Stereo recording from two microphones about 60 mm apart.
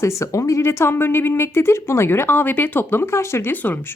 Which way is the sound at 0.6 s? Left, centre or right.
Left.